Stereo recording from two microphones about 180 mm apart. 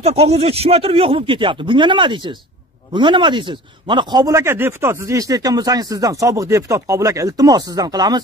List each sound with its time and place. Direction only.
0.0 s speech: 35° right (ahead or behind)